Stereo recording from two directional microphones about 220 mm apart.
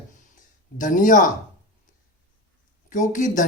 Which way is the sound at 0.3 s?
35° left (ahead or behind).